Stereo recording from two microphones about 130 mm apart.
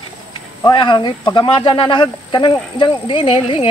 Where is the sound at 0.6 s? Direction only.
35° left (ahead or behind).